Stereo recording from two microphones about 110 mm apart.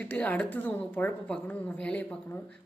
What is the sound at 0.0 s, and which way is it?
Speech, 15° left (ahead or behind).